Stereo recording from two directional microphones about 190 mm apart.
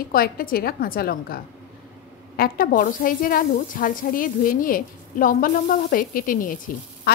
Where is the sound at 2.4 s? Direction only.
50° left (ahead or behind).